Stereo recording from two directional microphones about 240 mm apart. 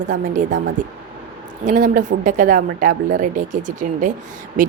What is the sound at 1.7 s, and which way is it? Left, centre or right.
A woman's voice, right.